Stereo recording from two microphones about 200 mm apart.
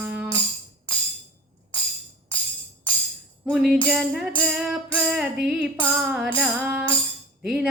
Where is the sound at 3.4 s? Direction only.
Centre (ahead or behind).